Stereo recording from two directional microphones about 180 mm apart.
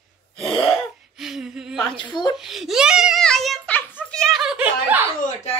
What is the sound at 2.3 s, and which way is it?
A child's voice, centre (ahead or behind).